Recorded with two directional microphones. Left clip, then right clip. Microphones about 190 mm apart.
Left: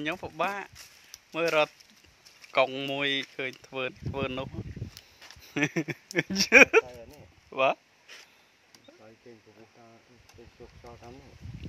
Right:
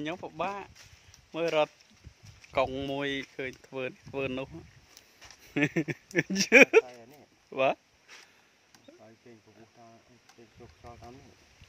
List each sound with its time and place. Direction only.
0.0 s speech: 5° right (ahead or behind); by 4.5 s 25° right (ahead or behind)
4.9 s a sound: 40° left (ahead or behind)
5.4 s speech: 30° right (ahead or behind)